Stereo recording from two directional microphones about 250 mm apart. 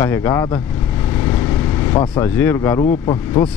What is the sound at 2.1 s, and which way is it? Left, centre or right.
Speech, centre.